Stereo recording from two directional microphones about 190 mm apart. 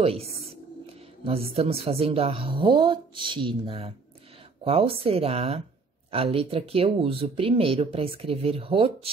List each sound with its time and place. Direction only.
0.0 s speech: 30° right (ahead or behind)